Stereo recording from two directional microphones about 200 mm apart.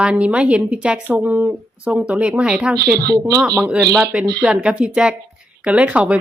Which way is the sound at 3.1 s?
15° right (ahead or behind).